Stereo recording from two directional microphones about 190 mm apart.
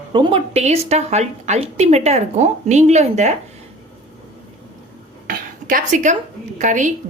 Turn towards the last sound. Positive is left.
turn(degrees=-40)  # may be behind; listen again after turning